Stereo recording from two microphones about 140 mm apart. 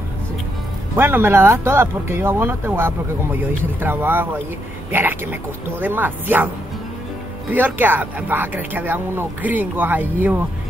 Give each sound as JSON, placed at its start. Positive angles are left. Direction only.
{"t": 0.9, "sound": "speech", "side_deg": -15}